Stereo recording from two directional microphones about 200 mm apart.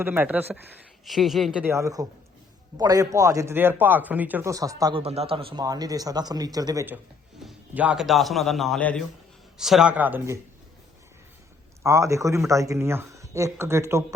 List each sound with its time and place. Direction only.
0.0 s a man's voice: 10° right (ahead or behind)
11.8 s a man's voice: 15° right (ahead or behind)